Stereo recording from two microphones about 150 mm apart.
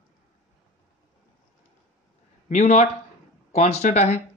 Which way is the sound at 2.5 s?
50° left (ahead or behind).